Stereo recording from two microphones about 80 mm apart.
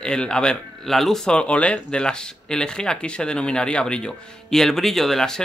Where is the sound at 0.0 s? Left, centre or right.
Centre.